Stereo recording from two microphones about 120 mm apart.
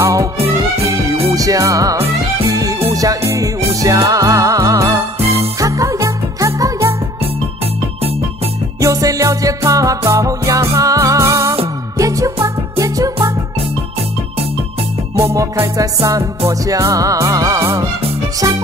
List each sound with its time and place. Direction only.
0.0 s music: 25° right (ahead or behind)
8.8 s music: 30° right (ahead or behind)
15.2 s music: 25° right (ahead or behind)